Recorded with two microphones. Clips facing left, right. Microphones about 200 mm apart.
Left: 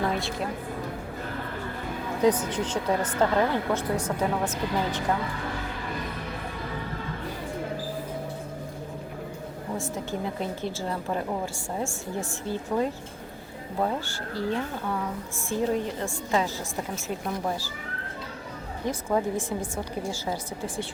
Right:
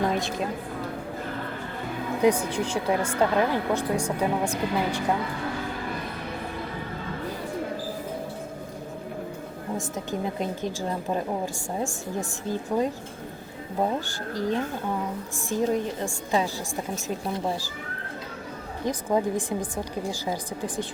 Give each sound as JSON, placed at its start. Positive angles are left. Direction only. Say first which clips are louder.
{"t": 0.0, "sound": "a sound", "louder": "right 2 dB", "side_deg": -20}
{"t": 2.2, "sound": "speech", "louder": "right 1 dB", "side_deg": -10}
{"t": 9.7, "sound": "speech", "louder": "right 1 dB", "side_deg": -15}
{"t": 14.3, "sound": "speech", "louder": "right 2 dB", "side_deg": -15}
{"t": 18.9, "sound": "speech", "louder": "right 2 dB", "side_deg": -15}